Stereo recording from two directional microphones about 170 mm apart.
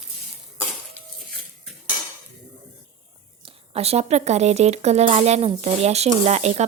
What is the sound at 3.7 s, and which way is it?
Speech, 35° right (ahead or behind).